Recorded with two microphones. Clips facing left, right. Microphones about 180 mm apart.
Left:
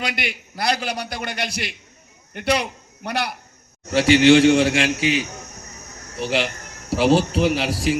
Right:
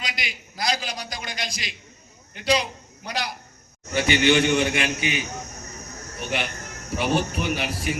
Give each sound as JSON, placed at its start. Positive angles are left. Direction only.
{"t": 0.0, "sound": "a man's voice", "side_deg": 60}
{"t": 3.8, "sound": "a man's voice", "side_deg": 80}